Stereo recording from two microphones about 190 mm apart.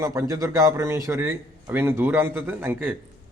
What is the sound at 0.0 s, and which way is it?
A man's voice, 15° right (ahead or behind).